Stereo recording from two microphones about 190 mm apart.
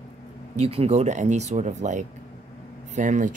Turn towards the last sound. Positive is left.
turn(degrees=-40)  # may be behind; listen again after turning